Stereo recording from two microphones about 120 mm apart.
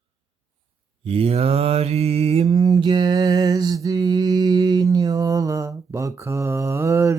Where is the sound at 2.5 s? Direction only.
35° right (ahead or behind).